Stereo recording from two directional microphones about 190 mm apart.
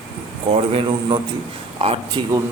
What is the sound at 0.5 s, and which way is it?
A man's voice, 30° right (ahead or behind).